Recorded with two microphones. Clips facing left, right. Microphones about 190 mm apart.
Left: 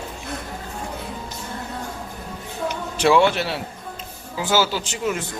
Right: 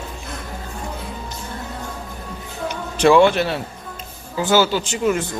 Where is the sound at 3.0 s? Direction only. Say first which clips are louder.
Right 4 dB; 5° left (ahead or behind).